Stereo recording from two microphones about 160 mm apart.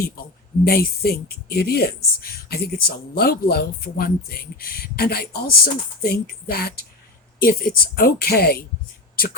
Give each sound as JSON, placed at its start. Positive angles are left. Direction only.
{"t": 0.0, "sound": "speech", "side_deg": 70}